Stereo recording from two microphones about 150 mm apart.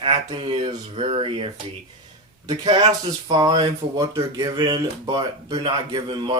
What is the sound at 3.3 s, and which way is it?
Speech, 25° right (ahead or behind).